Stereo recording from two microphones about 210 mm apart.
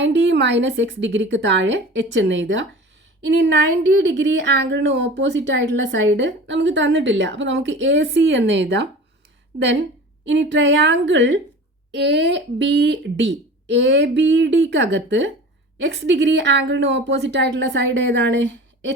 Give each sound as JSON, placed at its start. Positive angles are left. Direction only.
{"t": 0.0, "sound": "speech", "side_deg": -60}
{"t": 10.2, "sound": "speech", "side_deg": -60}